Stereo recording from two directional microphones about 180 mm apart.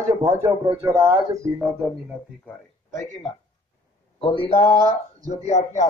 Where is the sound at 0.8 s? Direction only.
15° right (ahead or behind).